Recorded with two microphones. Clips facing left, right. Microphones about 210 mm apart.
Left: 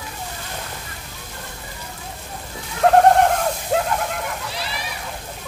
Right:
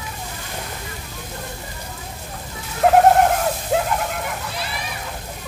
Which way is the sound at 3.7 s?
5° right (ahead or behind).